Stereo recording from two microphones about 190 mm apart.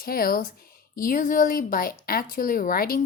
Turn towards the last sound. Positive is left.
turn(degrees=50)  # may be behind; listen again after turning